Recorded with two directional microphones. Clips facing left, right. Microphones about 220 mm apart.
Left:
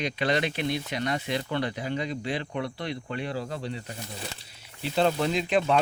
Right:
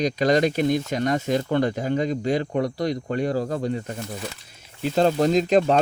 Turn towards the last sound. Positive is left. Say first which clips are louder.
# right 6 dB
turn(degrees=-40)  # may be behind; listen again after turning